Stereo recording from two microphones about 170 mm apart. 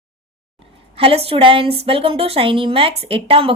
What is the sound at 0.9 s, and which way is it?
A woman's voice, 35° right (ahead or behind).